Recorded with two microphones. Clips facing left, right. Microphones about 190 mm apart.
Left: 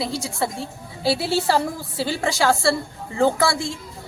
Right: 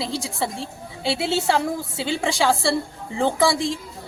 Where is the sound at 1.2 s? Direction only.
20° right (ahead or behind).